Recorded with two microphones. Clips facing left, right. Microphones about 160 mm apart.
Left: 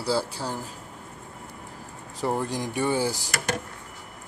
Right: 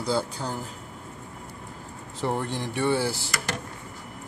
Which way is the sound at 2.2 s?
10° left (ahead or behind).